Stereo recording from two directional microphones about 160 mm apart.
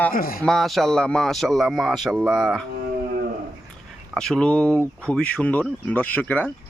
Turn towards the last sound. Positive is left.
turn(degrees=10)  # may be behind; listen again after turning